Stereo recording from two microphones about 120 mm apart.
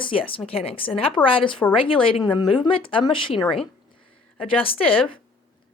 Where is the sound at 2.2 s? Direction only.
35° left (ahead or behind).